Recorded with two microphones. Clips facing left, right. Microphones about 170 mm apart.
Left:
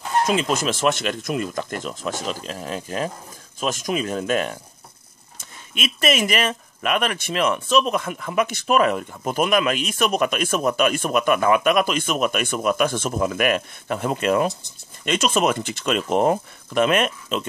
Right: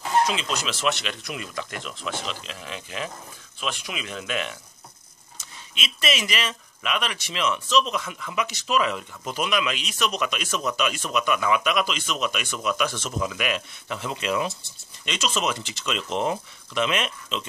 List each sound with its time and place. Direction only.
0.3 s speech: 50° left (ahead or behind)